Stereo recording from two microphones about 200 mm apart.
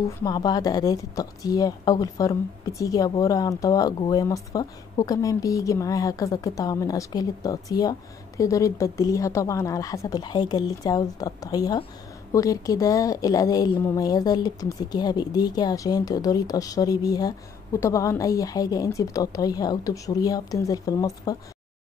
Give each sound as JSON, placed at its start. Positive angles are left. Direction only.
{"t": 0.2, "sound": "a woman's voice", "side_deg": 20}